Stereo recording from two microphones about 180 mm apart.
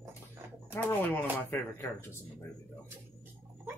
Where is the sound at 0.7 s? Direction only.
10° left (ahead or behind).